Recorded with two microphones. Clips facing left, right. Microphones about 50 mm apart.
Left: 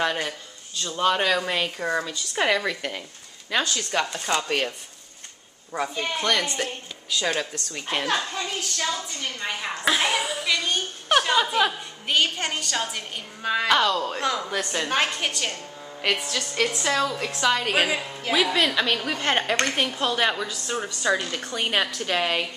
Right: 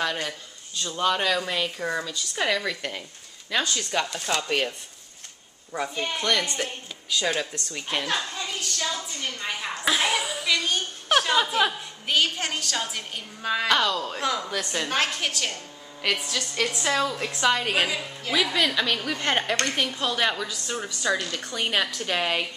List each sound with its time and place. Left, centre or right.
0.0 s a woman's voice: centre
0.3 s a woman's voice: centre
8.9 s a woman's voice: centre
17.7 s a woman's voice: centre